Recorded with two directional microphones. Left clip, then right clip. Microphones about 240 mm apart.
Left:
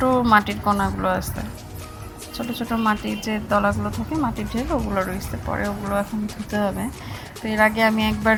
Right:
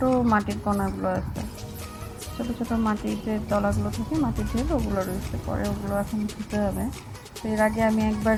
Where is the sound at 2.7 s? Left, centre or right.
Left.